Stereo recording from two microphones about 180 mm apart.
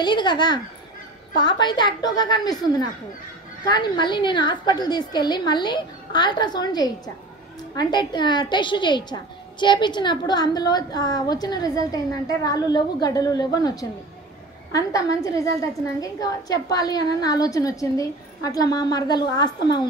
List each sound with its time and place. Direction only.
0.0 s a woman's voice: 25° left (ahead or behind)
3.6 s a woman's voice: 25° left (ahead or behind)